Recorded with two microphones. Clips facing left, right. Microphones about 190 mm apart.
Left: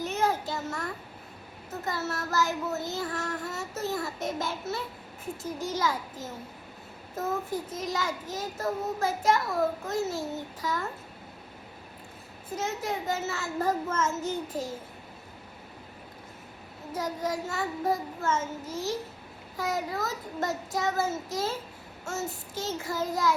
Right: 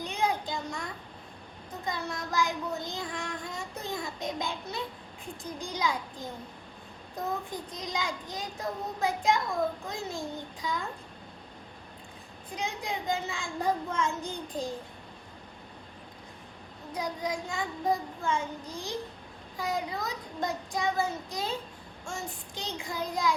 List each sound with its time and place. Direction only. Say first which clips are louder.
0.0 s child singing: left 2 dB; 5° left (ahead or behind)
12.5 s child singing: left 3 dB; 5° left (ahead or behind)
13.9 s child singing: left 2 dB; 45° left (ahead or behind)
14.2 s child singing: left 3 dB; 5° left (ahead or behind)
16.9 s child singing: left 2 dB; 5° left (ahead or behind)